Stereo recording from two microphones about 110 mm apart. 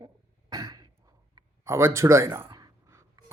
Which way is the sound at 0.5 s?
35° right (ahead or behind).